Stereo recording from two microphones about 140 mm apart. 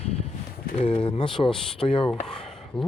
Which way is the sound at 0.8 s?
40° left (ahead or behind).